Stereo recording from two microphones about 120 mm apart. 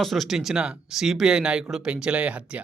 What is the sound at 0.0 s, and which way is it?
Speech, centre (ahead or behind).